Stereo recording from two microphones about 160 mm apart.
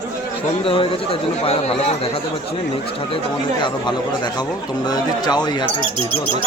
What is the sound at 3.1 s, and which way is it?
Speech, 30° left (ahead or behind).